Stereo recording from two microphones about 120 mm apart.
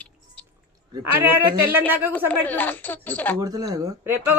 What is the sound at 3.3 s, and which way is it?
Speech, 30° right (ahead or behind).